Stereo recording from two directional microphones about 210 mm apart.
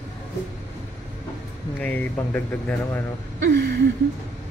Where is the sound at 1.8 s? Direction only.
10° left (ahead or behind).